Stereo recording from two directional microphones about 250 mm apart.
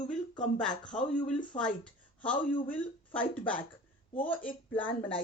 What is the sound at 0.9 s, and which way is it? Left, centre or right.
Speech, left.